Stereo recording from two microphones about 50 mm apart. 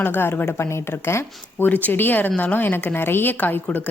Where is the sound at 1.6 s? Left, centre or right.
Left.